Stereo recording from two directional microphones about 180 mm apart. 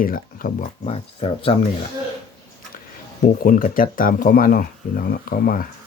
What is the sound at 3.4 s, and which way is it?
Speech, 50° left (ahead or behind).